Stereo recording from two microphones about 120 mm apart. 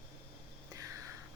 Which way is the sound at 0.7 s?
30° right (ahead or behind).